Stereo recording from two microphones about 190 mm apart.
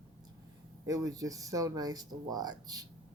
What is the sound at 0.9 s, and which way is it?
Speech, 20° right (ahead or behind).